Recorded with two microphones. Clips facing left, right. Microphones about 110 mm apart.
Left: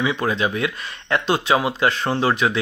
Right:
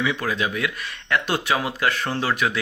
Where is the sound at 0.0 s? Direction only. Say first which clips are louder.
Left 3 dB; 20° left (ahead or behind).